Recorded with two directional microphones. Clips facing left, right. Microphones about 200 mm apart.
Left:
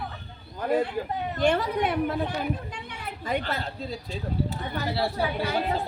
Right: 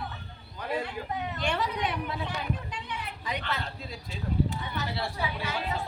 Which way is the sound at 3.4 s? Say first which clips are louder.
Left 4 dB; 35° left (ahead or behind).